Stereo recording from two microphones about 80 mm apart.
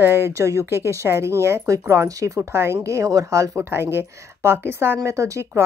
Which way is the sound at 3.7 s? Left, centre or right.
Right.